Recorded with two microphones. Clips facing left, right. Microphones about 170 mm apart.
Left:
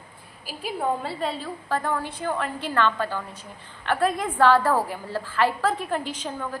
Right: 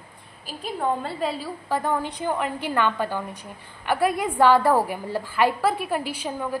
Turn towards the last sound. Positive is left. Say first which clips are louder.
# right 3 dB
turn(degrees=-10)  # may be behind; listen again after turning